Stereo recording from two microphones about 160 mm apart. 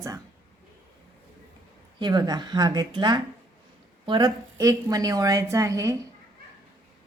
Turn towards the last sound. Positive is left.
turn(degrees=-20)  # may be behind; listen again after turning